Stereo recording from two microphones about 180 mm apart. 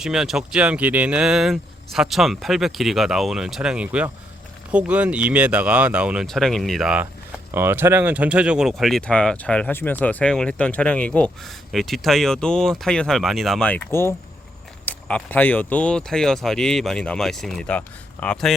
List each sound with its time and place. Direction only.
0.0 s speech: centre (ahead or behind)